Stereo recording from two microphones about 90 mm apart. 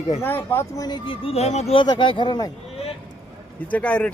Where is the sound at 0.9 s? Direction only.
65° left (ahead or behind); by 1.9 s 85° left.